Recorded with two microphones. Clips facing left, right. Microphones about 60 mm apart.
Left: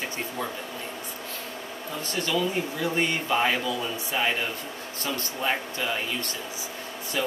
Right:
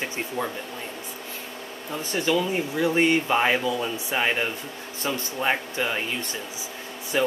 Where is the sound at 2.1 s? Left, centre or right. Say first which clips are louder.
Right 3 dB; centre.